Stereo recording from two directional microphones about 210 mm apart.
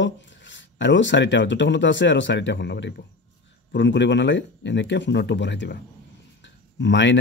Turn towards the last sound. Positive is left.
turn(degrees=60)  # may be behind; listen again after turning